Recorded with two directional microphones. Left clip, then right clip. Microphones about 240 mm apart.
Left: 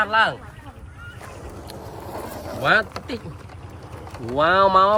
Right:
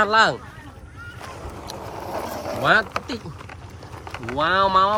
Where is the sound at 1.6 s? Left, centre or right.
Centre.